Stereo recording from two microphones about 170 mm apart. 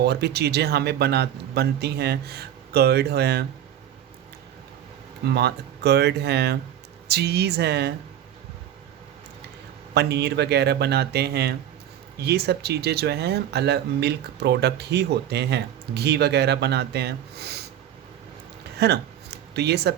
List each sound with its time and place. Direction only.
0.0 s speech: 70° right (ahead or behind)
5.3 s speech: 75° right (ahead or behind)
9.9 s speech: 75° right (ahead or behind)
18.8 s a sound: 75° right (ahead or behind)